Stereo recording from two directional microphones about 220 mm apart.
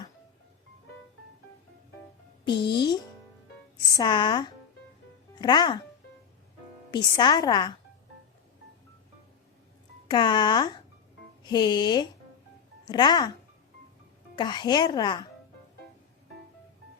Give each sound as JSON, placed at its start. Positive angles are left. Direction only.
{"t": 2.6, "sound": "speech", "side_deg": 20}
{"t": 6.9, "sound": "speech", "side_deg": 20}
{"t": 10.1, "sound": "speech", "side_deg": 20}
{"t": 14.3, "sound": "speech", "side_deg": 20}